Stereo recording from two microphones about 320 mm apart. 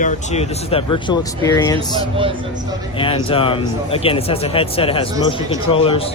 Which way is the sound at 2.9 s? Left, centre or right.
Centre.